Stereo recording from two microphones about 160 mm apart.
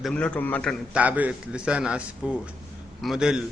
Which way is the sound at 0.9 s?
10° right (ahead or behind).